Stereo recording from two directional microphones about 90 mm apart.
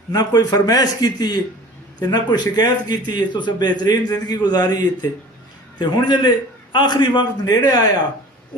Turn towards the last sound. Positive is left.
turn(degrees=50)  # may be behind; listen again after turning